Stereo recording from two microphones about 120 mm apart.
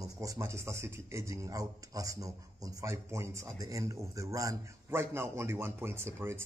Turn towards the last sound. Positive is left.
turn(degrees=-20)  # may be behind; listen again after turning